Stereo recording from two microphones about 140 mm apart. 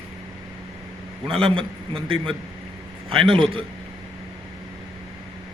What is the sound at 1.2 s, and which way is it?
Speech, 40° right (ahead or behind).